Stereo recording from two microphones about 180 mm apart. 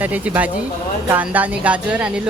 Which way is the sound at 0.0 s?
10° right (ahead or behind).